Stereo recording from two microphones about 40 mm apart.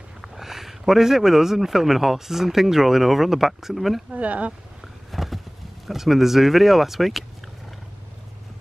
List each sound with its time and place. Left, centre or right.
0.2 s speech: centre
4.1 s speech: right
5.1 s a sound: centre
5.9 s speech: centre